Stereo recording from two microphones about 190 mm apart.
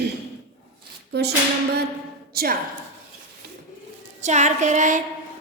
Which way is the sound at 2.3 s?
50° right (ahead or behind).